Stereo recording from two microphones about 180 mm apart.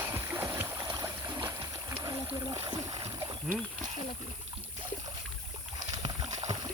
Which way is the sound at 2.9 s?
25° right (ahead or behind).